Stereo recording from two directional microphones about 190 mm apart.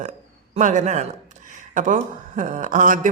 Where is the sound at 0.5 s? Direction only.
40° right (ahead or behind).